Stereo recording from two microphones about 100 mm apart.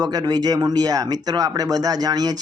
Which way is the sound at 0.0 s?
40° right (ahead or behind).